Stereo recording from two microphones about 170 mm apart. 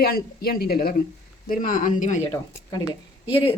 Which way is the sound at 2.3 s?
20° left (ahead or behind).